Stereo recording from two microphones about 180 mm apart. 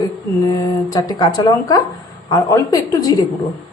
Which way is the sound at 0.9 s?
20° left (ahead or behind).